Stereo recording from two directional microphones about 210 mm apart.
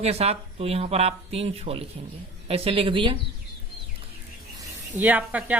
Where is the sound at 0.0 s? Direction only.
30° right (ahead or behind).